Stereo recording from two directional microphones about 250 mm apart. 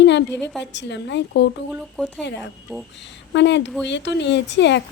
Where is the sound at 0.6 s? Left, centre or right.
Left.